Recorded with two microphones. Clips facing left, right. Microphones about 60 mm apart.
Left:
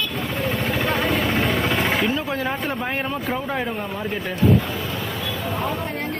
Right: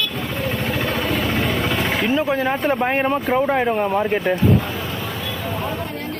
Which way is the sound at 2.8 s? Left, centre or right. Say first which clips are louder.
Right 6 dB; right.